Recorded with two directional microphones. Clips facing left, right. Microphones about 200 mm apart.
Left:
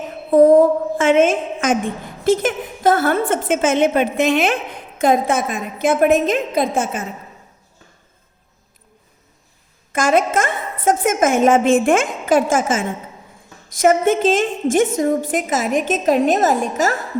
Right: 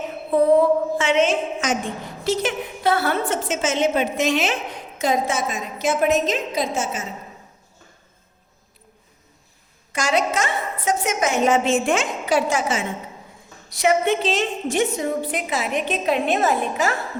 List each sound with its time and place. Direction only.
0.3 s a sound: 45° left (ahead or behind)
2.2 s a woman's voice: 50° left (ahead or behind)
9.9 s a woman's voice: 50° left (ahead or behind)